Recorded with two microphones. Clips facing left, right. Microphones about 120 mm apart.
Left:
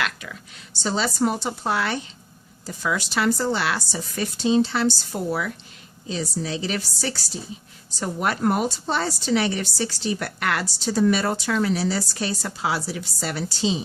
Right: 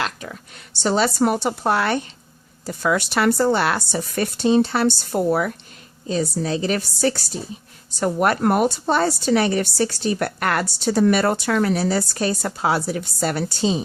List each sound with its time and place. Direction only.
0.0 s speech: 40° right (ahead or behind)
0.8 s a woman's voice: 60° right (ahead or behind)